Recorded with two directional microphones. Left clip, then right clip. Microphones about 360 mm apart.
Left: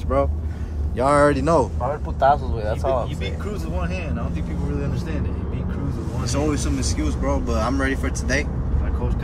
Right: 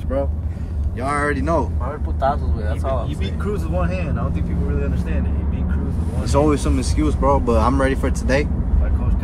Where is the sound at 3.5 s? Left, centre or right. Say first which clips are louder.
Right 5 dB; centre.